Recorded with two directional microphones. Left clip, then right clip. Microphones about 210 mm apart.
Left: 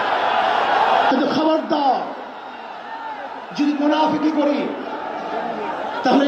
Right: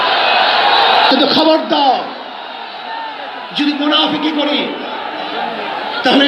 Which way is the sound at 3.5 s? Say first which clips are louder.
Right 5 dB; 30° left (ahead or behind).